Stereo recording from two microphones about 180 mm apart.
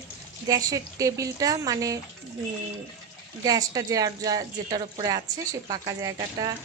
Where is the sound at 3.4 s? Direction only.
20° right (ahead or behind).